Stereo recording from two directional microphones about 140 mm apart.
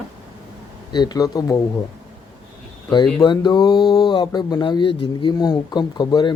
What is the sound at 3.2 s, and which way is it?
Speech, 30° left (ahead or behind).